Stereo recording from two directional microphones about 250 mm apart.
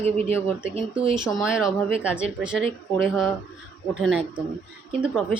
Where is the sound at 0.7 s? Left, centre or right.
Right.